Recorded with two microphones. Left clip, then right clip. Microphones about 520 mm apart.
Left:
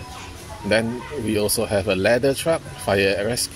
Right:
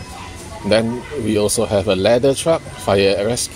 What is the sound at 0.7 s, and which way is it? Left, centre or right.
Speech, left.